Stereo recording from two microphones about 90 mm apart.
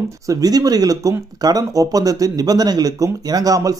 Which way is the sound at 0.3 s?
45° right (ahead or behind).